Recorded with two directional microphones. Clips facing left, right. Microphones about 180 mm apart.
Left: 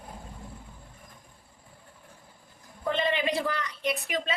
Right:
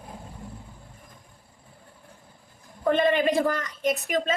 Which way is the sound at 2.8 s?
50° right (ahead or behind).